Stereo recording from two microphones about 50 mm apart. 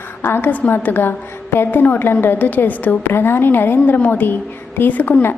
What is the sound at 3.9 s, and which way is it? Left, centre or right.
A woman's voice, left.